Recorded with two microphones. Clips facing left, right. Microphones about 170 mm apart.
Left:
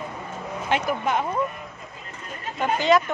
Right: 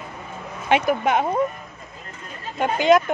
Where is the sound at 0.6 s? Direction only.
70° right (ahead or behind).